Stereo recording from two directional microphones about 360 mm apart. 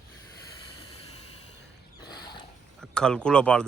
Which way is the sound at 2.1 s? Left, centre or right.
Centre.